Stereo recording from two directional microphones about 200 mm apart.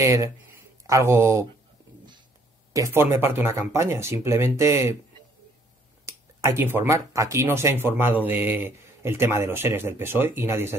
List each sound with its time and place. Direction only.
0.0 s speech: 15° right (ahead or behind)
2.7 s speech: 15° right (ahead or behind)
6.0 s speech: 15° right (ahead or behind)